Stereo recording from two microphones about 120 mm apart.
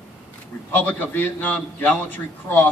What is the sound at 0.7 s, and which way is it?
A man's voice, 15° left (ahead or behind).